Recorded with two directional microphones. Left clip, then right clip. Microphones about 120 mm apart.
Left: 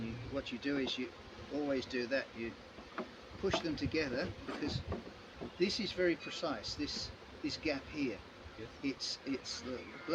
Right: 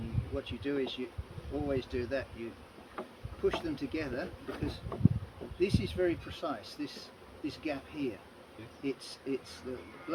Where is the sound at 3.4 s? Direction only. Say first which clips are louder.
Right 3 dB; 25° left (ahead or behind).